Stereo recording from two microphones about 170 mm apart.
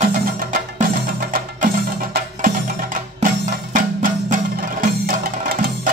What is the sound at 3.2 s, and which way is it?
Music, 55° right (ahead or behind).